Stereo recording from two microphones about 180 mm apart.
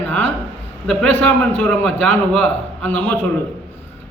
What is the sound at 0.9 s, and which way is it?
A man's voice, 10° left (ahead or behind).